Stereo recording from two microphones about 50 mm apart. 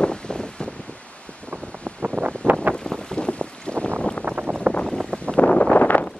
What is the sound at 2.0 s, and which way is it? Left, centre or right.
Wind noise, right.